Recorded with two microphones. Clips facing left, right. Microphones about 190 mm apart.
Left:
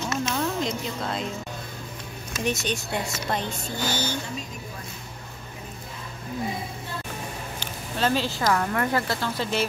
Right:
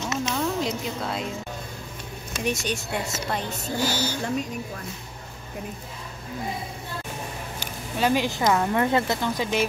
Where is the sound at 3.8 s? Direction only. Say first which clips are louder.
Left 1 dB; 10° right (ahead or behind).